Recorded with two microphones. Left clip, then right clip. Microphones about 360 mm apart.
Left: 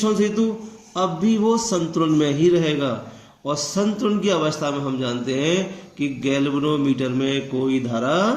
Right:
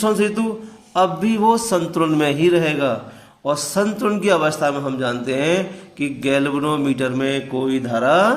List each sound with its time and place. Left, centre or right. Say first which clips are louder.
0.0 s a man's voice: right 2 dB; centre